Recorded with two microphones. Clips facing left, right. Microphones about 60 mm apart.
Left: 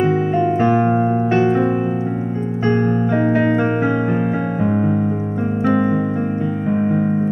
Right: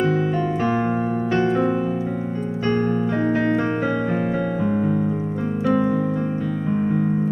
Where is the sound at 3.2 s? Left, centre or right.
Left.